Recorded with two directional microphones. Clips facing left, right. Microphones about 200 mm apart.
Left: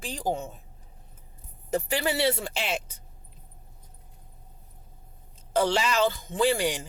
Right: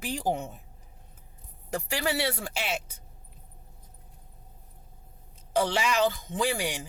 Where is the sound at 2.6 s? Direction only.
5° right (ahead or behind).